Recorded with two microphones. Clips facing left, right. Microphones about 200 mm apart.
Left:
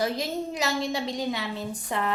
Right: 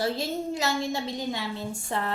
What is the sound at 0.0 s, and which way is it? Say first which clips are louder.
Music: even; 20° left (ahead or behind).